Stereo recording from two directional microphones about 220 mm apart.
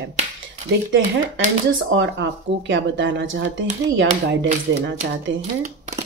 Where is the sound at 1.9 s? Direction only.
55° right (ahead or behind).